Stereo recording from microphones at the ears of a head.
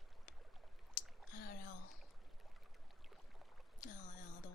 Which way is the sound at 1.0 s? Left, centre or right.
Left.